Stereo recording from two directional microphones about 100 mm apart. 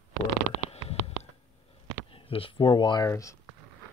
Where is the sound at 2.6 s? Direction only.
50° left (ahead or behind).